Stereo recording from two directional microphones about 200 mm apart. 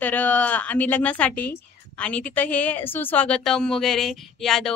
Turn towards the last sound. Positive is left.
turn(degrees=0)  # may be behind; listen again after turning